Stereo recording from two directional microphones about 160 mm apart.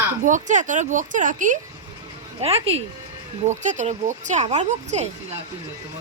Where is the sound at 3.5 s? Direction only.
50° right (ahead or behind).